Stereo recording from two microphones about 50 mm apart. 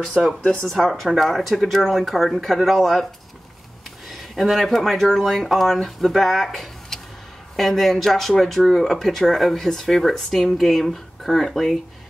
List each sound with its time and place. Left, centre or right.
0.0 s speech: centre
0.4 s speech: left
0.7 s speech: centre
4.1 s speech: centre